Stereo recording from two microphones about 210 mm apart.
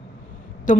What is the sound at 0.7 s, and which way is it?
Speech, 40° left (ahead or behind).